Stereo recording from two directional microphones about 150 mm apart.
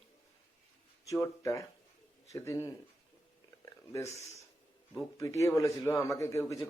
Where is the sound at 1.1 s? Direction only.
20° left (ahead or behind).